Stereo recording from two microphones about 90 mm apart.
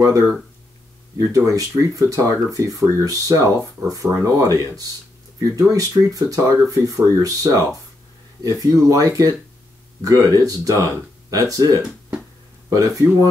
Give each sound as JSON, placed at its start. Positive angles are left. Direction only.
{"t": 1.1, "sound": "speech", "side_deg": -40}